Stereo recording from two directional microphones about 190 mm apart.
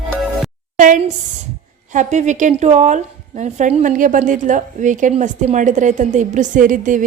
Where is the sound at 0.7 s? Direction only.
45° right (ahead or behind).